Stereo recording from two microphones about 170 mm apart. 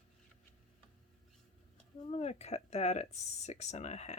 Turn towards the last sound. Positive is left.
turn(degrees=40)  # may be behind; listen again after turning